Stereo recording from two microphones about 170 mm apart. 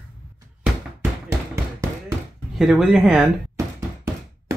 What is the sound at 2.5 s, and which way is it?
Speech, centre (ahead or behind).